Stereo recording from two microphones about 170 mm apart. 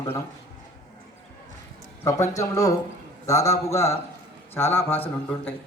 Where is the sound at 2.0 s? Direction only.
20° left (ahead or behind).